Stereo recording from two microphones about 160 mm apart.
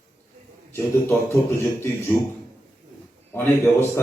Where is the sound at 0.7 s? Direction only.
15° left (ahead or behind).